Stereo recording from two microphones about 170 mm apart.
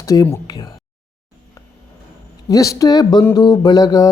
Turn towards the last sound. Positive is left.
turn(degrees=20)  # may be behind; listen again after turning